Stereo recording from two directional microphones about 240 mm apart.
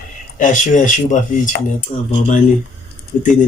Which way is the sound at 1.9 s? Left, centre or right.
Left.